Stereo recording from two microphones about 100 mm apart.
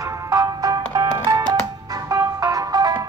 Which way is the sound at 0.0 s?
35° right (ahead or behind).